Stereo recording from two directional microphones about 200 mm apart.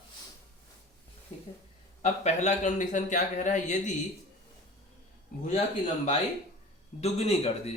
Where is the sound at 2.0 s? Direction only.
35° left (ahead or behind).